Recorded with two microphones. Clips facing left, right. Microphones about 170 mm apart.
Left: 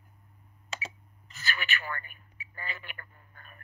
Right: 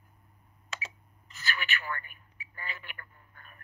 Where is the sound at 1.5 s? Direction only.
35° left (ahead or behind).